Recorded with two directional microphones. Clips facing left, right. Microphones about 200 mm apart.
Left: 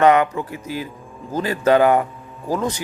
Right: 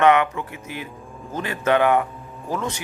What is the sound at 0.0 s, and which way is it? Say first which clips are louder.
Speech: left 2 dB; 35° left (ahead or behind).